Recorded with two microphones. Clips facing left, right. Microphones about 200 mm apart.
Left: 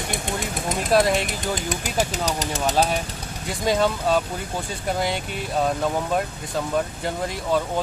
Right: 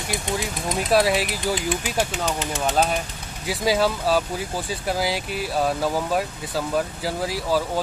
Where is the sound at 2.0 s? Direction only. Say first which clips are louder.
Even; 40° left (ahead or behind).